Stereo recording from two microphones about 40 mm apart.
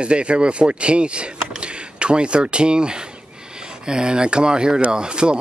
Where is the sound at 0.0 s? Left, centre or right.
Right.